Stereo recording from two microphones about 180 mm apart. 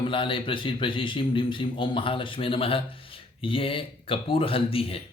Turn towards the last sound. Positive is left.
turn(degrees=30)  # may be behind; listen again after turning